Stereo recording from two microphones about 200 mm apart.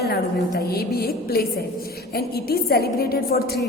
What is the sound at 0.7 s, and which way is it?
A woman's voice, 50° left (ahead or behind).